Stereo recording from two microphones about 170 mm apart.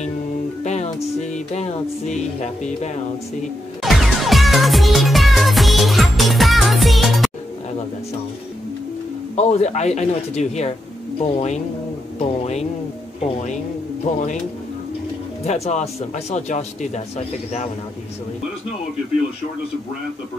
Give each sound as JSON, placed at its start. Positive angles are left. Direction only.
{"t": 0.7, "sound": "music", "side_deg": 40}
{"t": 1.5, "sound": "speech", "side_deg": 40}
{"t": 3.8, "sound": "music", "side_deg": 0}
{"t": 9.3, "sound": "speech", "side_deg": 40}
{"t": 15.4, "sound": "speech", "side_deg": 40}